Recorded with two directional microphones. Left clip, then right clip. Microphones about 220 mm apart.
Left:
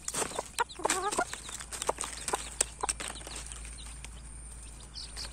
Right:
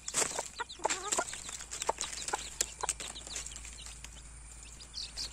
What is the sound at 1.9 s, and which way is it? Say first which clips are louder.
Livestock: left 1 dB; 10° right (ahead or behind).